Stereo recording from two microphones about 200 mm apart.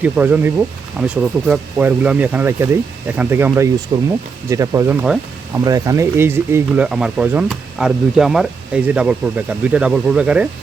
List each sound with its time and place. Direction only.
0.0 s speech: 10° right (ahead or behind)